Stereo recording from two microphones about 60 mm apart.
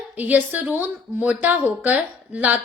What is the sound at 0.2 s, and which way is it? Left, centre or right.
A woman's voice, right.